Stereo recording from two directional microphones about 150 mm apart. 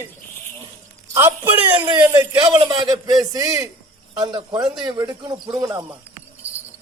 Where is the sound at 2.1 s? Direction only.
30° right (ahead or behind).